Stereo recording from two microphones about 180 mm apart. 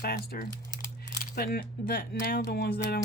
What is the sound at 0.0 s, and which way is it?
Speech, 55° left (ahead or behind).